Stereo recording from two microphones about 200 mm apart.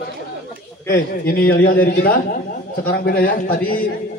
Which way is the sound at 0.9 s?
50° left (ahead or behind).